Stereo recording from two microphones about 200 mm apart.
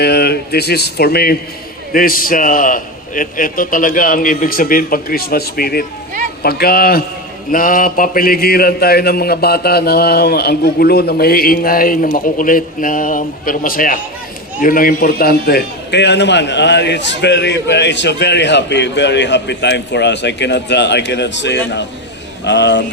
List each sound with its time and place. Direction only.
0.0 s a man's voice: 55° left (ahead or behind)